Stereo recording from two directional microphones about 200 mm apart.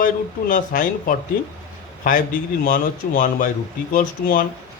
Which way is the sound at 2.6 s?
45° left (ahead or behind).